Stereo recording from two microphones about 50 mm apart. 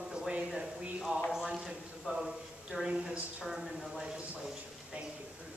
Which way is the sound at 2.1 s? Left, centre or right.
Right.